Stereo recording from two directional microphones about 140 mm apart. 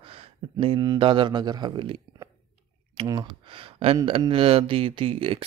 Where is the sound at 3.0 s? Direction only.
40° right (ahead or behind).